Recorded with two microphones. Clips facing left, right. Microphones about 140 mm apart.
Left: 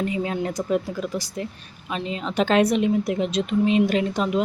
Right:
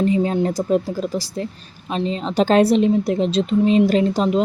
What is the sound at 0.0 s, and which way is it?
A woman's voice, 35° right (ahead or behind).